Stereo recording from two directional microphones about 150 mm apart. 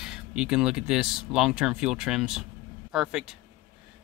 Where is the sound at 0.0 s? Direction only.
5° right (ahead or behind).